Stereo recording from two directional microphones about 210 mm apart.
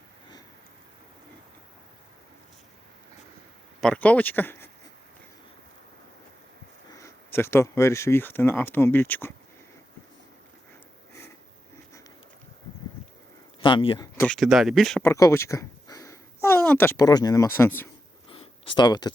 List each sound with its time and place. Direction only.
3.8 s speech: 5° left (ahead or behind)
6.9 s speech: 10° left (ahead or behind)
13.6 s speech: 25° left (ahead or behind)
14.2 s speech: 5° left (ahead or behind)
15.1 s speech: 15° left (ahead or behind)
18.3 s a sound: 25° left (ahead or behind)